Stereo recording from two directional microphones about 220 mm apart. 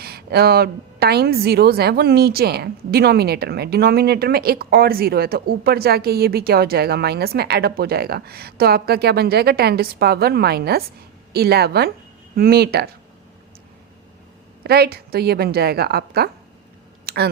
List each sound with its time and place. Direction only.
0.0 s a woman's voice: 45° right (ahead or behind)
14.6 s a woman's voice: 45° right (ahead or behind)
17.1 s a sound: 45° right (ahead or behind)